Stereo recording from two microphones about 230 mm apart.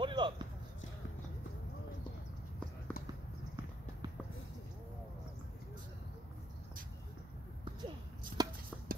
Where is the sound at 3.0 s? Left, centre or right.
Left.